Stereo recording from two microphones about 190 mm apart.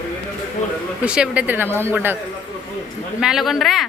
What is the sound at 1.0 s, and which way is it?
Speech, 5° right (ahead or behind).